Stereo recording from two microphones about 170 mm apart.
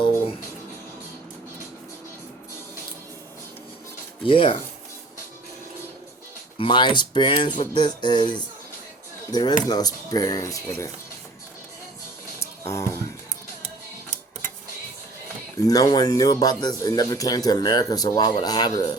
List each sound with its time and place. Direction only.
4.2 s speech: 30° left (ahead or behind)
6.6 s speech: 30° left (ahead or behind)
12.4 s music: 15° left (ahead or behind)
15.5 s speech: 20° left (ahead or behind)